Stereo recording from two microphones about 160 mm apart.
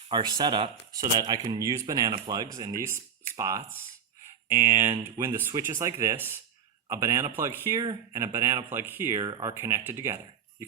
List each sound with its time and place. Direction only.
0.1 s speech: 25° right (ahead or behind)